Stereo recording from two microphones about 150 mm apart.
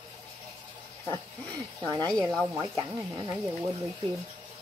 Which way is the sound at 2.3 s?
5° right (ahead or behind).